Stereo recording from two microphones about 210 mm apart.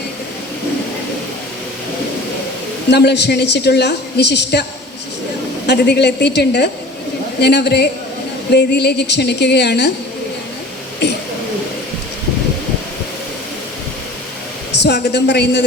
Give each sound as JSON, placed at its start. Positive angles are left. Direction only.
{"t": 2.9, "sound": "a woman's voice", "side_deg": 55}
{"t": 5.6, "sound": "a woman's voice", "side_deg": 50}
{"t": 11.0, "sound": "a woman's voice", "side_deg": 55}
{"t": 14.8, "sound": "a woman's voice", "side_deg": 55}